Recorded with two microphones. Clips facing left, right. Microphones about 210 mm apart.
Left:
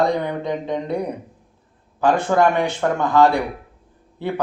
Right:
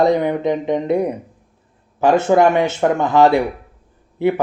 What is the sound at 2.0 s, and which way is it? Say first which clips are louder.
A man's voice: right 4 dB; 20° right (ahead or behind).